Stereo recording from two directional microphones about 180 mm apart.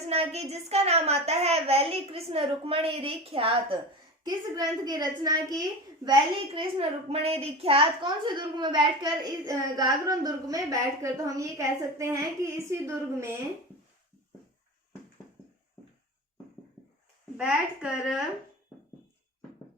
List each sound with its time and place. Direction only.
0.1 s a woman's voice: 35° right (ahead or behind); by 13.3 s 15° right (ahead or behind)
17.3 s a woman's voice: 5° right (ahead or behind)